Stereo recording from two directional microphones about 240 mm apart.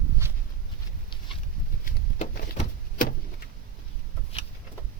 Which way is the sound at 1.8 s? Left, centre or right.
Left.